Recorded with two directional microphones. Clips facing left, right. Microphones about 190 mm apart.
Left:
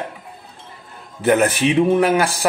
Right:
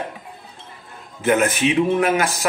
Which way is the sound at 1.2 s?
35° left (ahead or behind).